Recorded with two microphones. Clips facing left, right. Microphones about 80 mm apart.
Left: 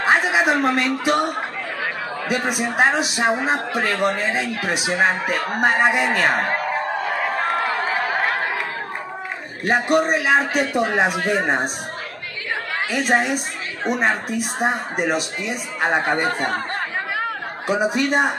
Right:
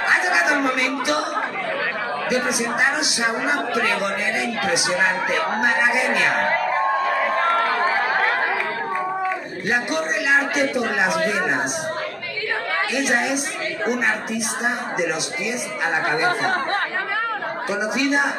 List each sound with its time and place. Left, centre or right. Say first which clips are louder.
0.0 s a sound: left 2 dB; left
2.3 s a man's voice: left 2 dB; left
9.9 s a man's voice: left 3 dB; left
12.9 s a man's voice: left 4 dB; left
17.6 s a man's voice: left 3 dB; left